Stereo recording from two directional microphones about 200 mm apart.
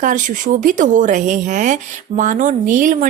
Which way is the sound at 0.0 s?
40° right (ahead or behind).